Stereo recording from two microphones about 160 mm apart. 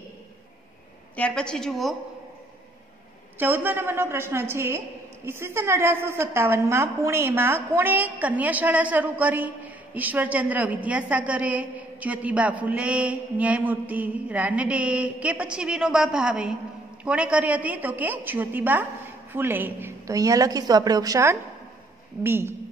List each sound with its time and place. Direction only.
1.1 s a woman's voice: 5° left (ahead or behind)
3.3 s a woman's voice: 10° right (ahead or behind)